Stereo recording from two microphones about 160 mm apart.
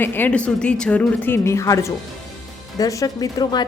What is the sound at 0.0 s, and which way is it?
A woman's voice, 10° left (ahead or behind).